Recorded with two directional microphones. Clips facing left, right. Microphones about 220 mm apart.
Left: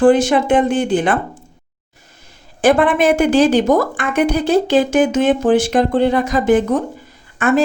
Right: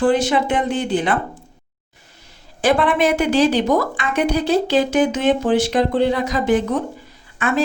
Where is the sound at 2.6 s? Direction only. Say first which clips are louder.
Left 3 dB; 50° left (ahead or behind).